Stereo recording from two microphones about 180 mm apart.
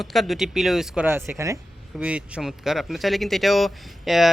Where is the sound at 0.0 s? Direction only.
Centre (ahead or behind).